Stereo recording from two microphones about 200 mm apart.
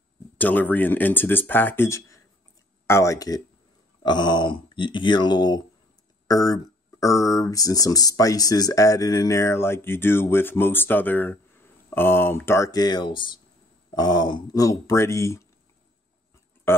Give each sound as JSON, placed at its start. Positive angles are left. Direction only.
{"t": 0.4, "sound": "speech", "side_deg": 10}
{"t": 16.7, "sound": "speech", "side_deg": 10}